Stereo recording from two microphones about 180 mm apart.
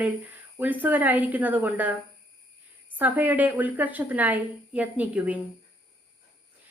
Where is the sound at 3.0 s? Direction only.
10° right (ahead or behind).